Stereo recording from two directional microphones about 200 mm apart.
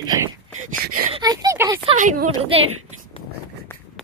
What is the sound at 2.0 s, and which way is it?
Speech, 40° right (ahead or behind).